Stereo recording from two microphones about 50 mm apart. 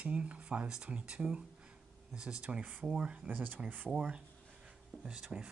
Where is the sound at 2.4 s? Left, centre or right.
Right.